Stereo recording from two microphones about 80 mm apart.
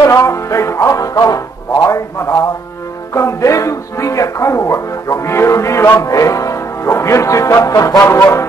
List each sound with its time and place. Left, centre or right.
0.0 s music: left
1.9 s a man's voice: left